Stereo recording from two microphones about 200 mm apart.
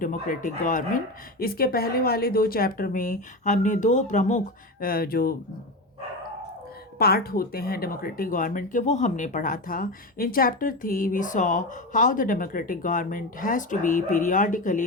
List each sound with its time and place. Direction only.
0.0 s speech: 40° left (ahead or behind)
7.0 s speech: 50° left (ahead or behind)